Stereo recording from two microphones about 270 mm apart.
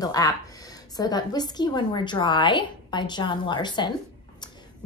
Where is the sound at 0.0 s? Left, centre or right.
Centre.